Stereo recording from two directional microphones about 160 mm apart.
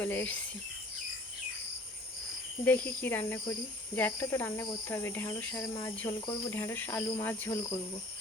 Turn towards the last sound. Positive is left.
turn(degrees=15)  # may be behind; listen again after turning